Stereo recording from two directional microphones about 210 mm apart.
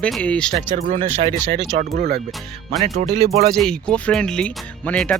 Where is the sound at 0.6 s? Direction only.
35° right (ahead or behind).